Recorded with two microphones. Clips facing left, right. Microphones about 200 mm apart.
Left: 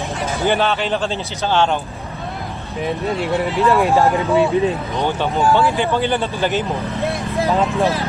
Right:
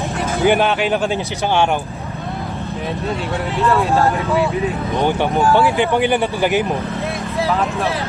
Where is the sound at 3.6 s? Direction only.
15° left (ahead or behind).